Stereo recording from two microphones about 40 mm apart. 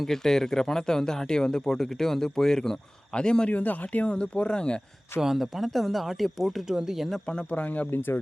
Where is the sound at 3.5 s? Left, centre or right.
Left.